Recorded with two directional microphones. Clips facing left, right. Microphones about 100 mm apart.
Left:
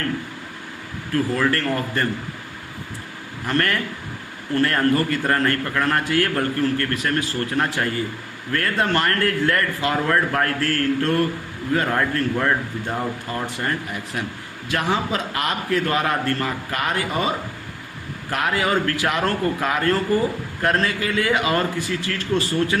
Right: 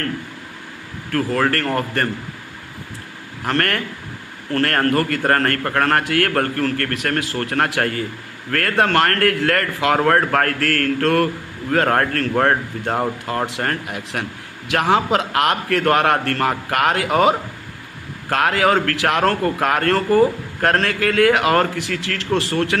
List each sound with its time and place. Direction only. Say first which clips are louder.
1.1 s a man's voice: right 2 dB; 55° right (ahead or behind)
3.4 s a man's voice: right 1 dB; 55° right (ahead or behind); by 11.3 s 70° right (ahead or behind)
11.7 s a man's voice: right 4 dB; 60° right (ahead or behind)
13.4 s a man's voice: right 2 dB; 70° right (ahead or behind)